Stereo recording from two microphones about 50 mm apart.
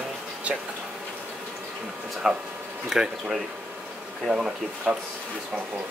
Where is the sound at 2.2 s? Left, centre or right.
Centre.